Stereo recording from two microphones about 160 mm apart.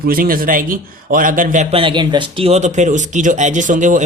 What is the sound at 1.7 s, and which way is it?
Speech, 35° right (ahead or behind).